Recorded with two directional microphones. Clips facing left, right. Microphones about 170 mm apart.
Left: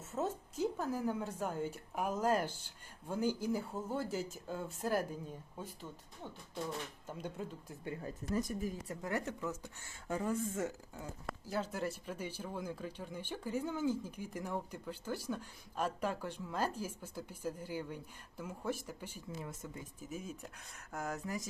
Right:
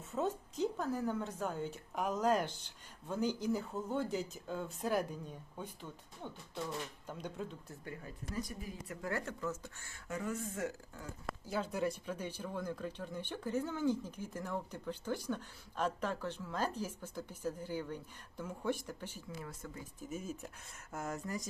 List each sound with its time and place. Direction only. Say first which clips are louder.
0.1 s a woman's voice: right 1 dB; 5° left (ahead or behind)
7.1 s a woman's voice: left 1 dB; 5° left (ahead or behind)
8.0 s speech: left 6 dB; 45° left (ahead or behind)
8.9 s a woman's voice: left 1 dB; 20° left (ahead or behind)
10.1 s speech: left 4 dB; 30° left (ahead or behind)
11.4 s a woman's voice: right 2 dB; centre (ahead or behind)
19.5 s speech: left 1 dB; 20° left (ahead or behind)
20.1 s speech: right 3 dB; centre (ahead or behind)